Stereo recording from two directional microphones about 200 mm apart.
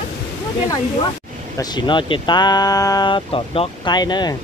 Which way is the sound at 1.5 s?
20° left (ahead or behind).